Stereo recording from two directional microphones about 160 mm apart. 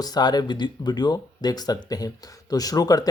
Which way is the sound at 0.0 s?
25° left (ahead or behind).